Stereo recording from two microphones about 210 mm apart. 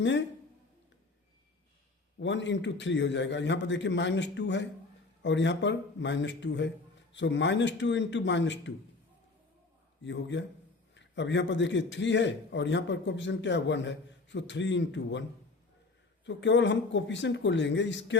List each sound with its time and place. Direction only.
2.1 s a man's voice: 60° left (ahead or behind)
10.0 s a man's voice: 60° left (ahead or behind)
16.2 s a man's voice: 60° left (ahead or behind)